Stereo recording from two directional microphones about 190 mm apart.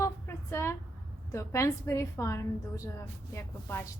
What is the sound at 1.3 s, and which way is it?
A woman's voice, 15° left (ahead or behind).